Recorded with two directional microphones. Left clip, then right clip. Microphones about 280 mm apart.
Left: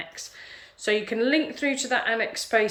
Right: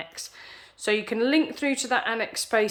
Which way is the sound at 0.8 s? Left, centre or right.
Centre.